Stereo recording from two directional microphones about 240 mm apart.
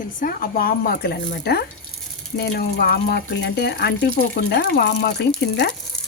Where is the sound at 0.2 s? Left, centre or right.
Left.